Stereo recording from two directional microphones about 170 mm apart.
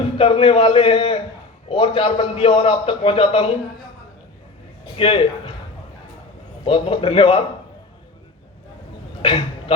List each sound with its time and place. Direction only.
0.0 s a man's voice: 30° left (ahead or behind)
4.9 s a man's voice: 30° left (ahead or behind)
6.7 s a man's voice: 30° left (ahead or behind)
9.2 s a sound: 30° left (ahead or behind)